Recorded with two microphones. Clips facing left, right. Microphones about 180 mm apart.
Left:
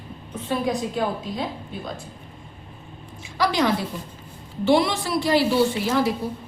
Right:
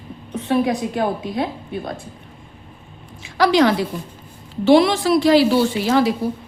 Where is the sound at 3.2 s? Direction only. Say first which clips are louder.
Right 7 dB; 85° right.